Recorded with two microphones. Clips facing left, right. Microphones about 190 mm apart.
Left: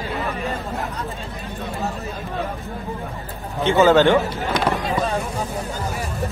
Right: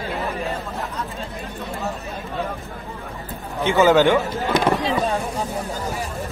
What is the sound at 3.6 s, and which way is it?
Speech, 15° right (ahead or behind).